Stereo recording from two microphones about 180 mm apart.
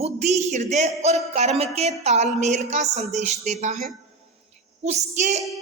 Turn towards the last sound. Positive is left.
turn(degrees=-40)  # may be behind; listen again after turning